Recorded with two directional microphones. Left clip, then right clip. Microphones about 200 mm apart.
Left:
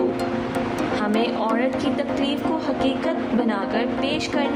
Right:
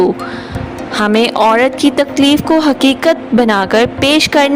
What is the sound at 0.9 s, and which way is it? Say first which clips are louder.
A woman's voice: right 14 dB; 55° right (ahead or behind).